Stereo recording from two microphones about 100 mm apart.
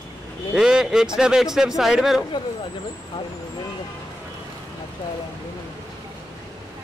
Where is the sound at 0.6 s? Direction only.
5° right (ahead or behind).